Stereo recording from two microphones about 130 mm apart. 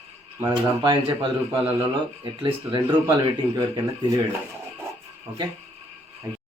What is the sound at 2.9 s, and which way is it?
Speech, 35° right (ahead or behind).